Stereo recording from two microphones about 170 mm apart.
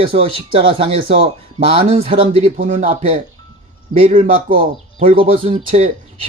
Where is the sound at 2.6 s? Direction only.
55° right (ahead or behind).